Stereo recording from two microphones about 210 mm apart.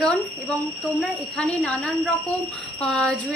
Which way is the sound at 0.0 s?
5° left (ahead or behind).